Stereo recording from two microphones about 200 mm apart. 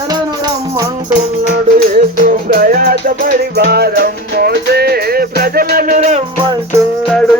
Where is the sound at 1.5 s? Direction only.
40° right (ahead or behind).